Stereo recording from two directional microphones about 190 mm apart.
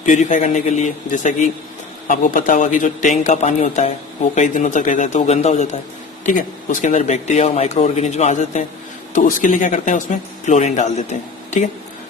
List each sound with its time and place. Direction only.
0.0 s speech: 40° left (ahead or behind)
6.8 s speech: 35° left (ahead or behind)